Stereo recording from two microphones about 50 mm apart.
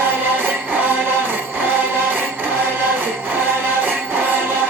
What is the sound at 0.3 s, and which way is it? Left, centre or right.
Music, right.